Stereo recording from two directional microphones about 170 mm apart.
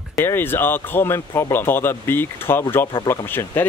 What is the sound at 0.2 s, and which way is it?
Speech, 15° left (ahead or behind).